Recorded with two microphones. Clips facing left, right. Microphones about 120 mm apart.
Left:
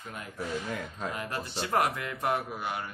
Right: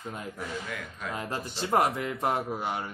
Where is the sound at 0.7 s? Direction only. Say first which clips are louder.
Left 2 dB; 35° left (ahead or behind).